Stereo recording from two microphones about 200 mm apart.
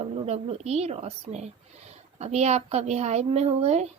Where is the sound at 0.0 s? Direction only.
30° right (ahead or behind).